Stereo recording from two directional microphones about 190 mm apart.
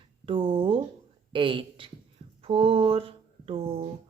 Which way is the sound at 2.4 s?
30° right (ahead or behind).